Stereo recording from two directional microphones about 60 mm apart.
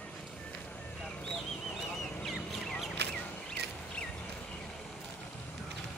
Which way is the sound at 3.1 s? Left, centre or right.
Centre.